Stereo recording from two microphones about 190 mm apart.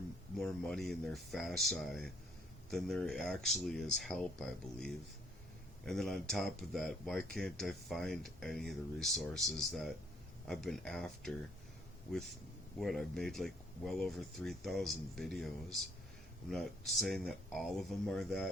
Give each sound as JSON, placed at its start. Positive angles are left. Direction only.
{"t": 0.3, "sound": "speech", "side_deg": 0}
{"t": 12.8, "sound": "speech", "side_deg": 0}